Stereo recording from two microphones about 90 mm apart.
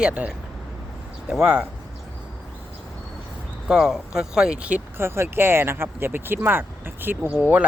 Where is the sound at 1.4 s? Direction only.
15° right (ahead or behind).